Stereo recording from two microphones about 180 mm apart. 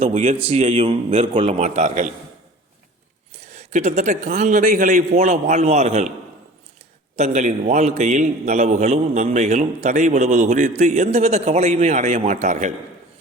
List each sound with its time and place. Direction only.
0.0 s a man's voice: 35° right (ahead or behind)
3.5 s a man's voice: 40° right (ahead or behind)
7.2 s a man's voice: 40° right (ahead or behind)